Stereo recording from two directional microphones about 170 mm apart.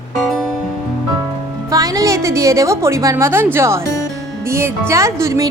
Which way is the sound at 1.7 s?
20° right (ahead or behind).